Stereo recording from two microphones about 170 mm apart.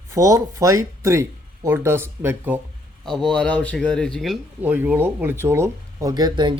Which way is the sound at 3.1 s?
5° left (ahead or behind).